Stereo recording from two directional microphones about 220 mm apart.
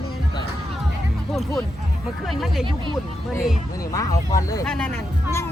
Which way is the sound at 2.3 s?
Centre (ahead or behind).